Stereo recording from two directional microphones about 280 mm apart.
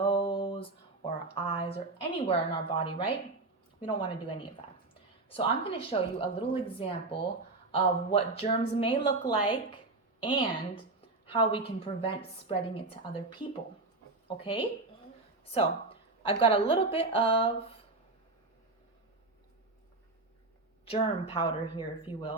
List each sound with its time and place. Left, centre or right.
0.0 s a sound: centre
3.8 s a woman's voice: centre
20.8 s speech: left